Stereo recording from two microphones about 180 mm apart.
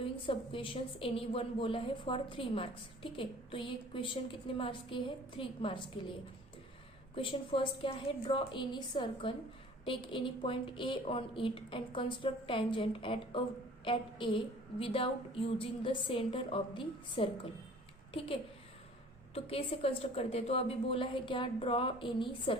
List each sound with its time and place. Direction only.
0.0 s a woman's voice: 30° left (ahead or behind)
7.2 s a woman's voice: 30° left (ahead or behind)
19.3 s a woman's voice: 35° left (ahead or behind)